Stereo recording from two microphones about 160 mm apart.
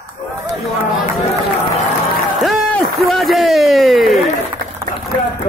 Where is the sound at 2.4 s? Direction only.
5° left (ahead or behind).